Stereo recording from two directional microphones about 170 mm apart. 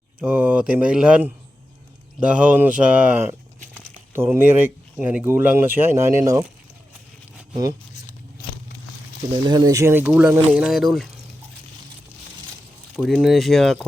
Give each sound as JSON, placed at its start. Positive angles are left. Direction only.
{"t": 0.2, "sound": "speech", "side_deg": -10}
{"t": 7.5, "sound": "speech", "side_deg": -20}
{"t": 9.5, "sound": "speech", "side_deg": -20}
{"t": 13.0, "sound": "speech", "side_deg": 0}